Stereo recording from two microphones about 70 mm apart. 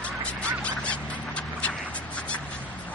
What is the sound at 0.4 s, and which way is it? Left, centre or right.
Quack, centre.